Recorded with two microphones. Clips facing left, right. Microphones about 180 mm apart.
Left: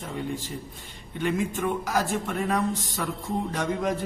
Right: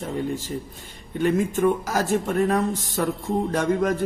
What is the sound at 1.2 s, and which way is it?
A man's voice, 45° right (ahead or behind).